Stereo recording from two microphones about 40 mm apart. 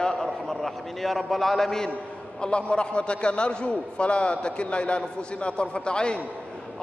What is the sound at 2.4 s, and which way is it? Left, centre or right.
A man's voice, left.